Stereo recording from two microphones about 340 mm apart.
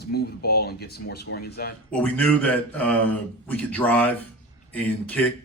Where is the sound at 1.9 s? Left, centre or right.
Centre.